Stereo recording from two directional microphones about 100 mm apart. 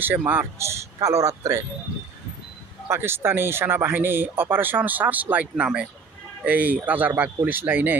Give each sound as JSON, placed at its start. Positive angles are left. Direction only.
{"t": 0.0, "sound": "a man's voice", "side_deg": -20}
{"t": 2.9, "sound": "speech", "side_deg": -25}